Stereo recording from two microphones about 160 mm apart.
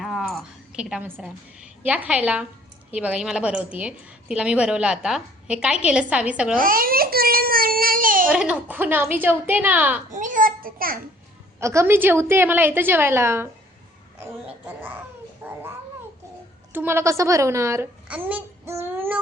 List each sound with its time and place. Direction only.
0.0 s a sound: centre (ahead or behind)
1.8 s a woman's voice: 10° right (ahead or behind)
6.6 s speech: 60° right (ahead or behind)
8.3 s a woman's voice: 5° right (ahead or behind)
10.1 s a sound: 55° right (ahead or behind)
11.6 s a woman's voice: 20° right (ahead or behind)
15.4 s a woman's voice: 10° right (ahead or behind)
16.7 s a child's voice: 15° right (ahead or behind)